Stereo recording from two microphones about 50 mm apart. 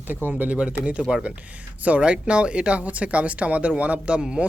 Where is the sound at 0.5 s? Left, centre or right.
Right.